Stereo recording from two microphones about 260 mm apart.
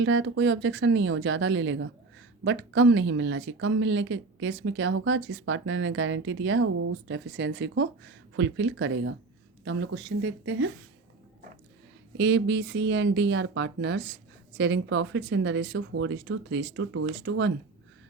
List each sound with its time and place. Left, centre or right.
0.0 s speech: right
12.1 s speech: right